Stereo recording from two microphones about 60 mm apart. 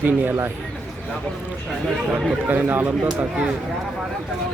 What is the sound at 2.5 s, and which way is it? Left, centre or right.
Speech, right.